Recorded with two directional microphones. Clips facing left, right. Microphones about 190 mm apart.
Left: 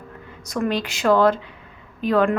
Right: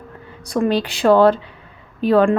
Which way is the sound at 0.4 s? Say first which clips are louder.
Right 5 dB; 30° right (ahead or behind).